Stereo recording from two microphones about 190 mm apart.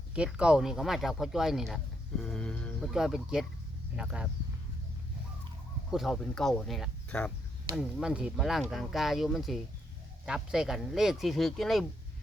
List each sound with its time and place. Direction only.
0.1 s speech: 5° right (ahead or behind)
5.9 s speech: centre (ahead or behind)